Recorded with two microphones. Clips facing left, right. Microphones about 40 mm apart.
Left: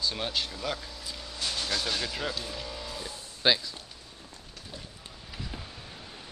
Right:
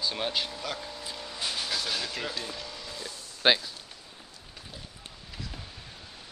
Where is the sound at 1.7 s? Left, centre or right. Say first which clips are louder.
Left 1 dB; centre.